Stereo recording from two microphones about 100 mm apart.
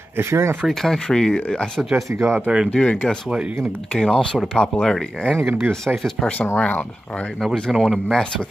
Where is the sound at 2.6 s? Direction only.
10° left (ahead or behind).